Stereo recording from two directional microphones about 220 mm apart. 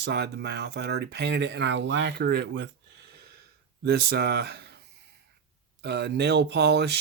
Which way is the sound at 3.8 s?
45° right (ahead or behind).